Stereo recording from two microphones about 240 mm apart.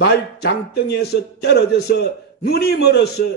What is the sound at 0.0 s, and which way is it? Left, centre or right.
Speech, left.